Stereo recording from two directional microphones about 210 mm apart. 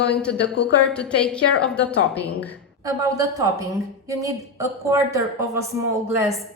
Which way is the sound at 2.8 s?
15° right (ahead or behind).